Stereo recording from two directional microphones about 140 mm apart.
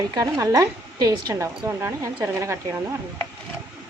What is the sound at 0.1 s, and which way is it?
A woman's voice, 25° right (ahead or behind).